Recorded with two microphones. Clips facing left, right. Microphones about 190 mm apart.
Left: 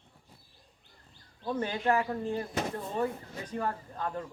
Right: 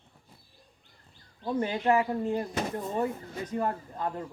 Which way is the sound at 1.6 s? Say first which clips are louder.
Right 3 dB; 20° right (ahead or behind).